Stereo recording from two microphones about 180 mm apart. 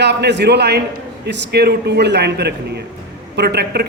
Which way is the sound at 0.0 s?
70° right (ahead or behind).